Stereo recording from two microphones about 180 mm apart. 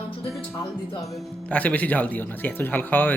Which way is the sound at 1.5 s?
10° left (ahead or behind).